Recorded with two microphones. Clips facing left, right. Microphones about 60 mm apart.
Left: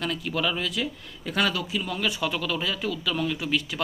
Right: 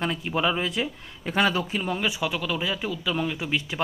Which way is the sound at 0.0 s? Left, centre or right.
Right.